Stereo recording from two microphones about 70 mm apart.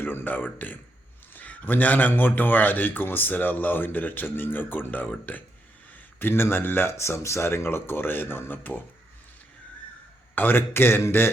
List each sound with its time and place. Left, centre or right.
0.0 s a man's voice: left
10.3 s speech: left